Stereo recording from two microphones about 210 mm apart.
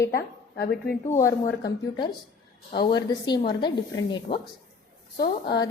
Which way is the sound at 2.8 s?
20° left (ahead or behind).